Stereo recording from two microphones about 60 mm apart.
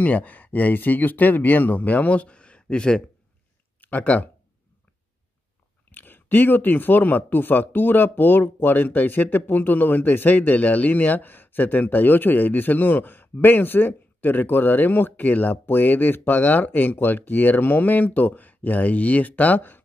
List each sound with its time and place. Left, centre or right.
0.0 s speech: left
3.8 s speech: left
5.9 s speech: left